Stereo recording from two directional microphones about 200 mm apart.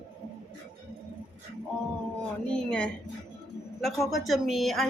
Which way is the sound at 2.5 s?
5° left (ahead or behind).